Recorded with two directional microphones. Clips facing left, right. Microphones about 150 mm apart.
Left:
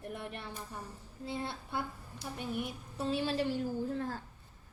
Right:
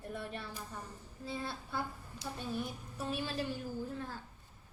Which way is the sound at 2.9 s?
30° left (ahead or behind).